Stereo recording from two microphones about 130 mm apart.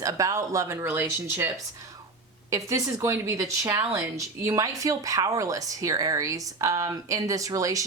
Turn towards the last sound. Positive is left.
turn(degrees=-25)  # may be behind; listen again after turning